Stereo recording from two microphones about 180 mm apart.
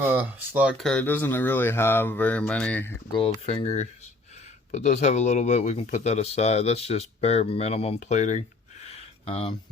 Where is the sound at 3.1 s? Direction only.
30° left (ahead or behind).